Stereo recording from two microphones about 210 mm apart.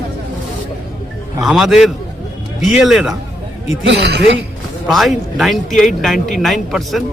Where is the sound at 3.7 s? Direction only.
60° right (ahead or behind).